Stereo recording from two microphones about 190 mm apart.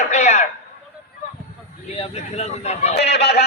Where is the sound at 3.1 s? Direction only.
60° left (ahead or behind).